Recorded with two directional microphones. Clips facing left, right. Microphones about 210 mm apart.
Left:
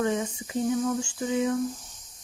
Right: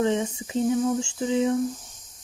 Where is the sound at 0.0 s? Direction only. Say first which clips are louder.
Right 3 dB; 25° right (ahead or behind).